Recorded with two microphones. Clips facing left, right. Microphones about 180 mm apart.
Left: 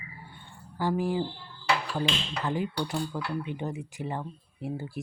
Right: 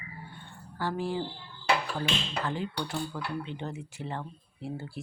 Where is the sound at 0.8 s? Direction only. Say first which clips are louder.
Left 4 dB; 15° left (ahead or behind).